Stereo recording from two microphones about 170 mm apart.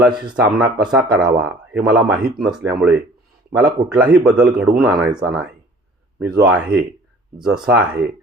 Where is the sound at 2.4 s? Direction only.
Centre (ahead or behind).